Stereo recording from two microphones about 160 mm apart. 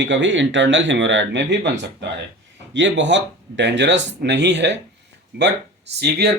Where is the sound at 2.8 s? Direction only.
90° right.